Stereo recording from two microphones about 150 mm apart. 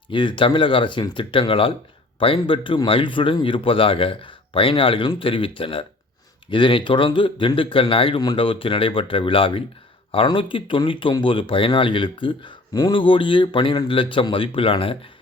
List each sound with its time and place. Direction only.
0.1 s speech: 30° left (ahead or behind)